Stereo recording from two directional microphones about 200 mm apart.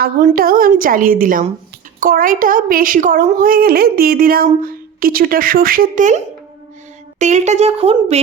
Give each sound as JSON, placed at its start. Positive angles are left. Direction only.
{"t": 0.3, "sound": "speech", "side_deg": -45}